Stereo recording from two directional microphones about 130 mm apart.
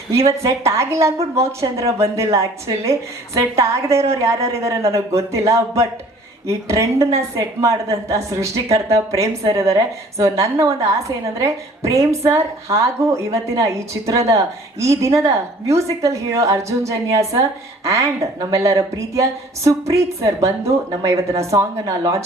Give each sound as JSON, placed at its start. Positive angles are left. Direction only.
{"t": 0.3, "sound": "a woman's voice", "side_deg": -25}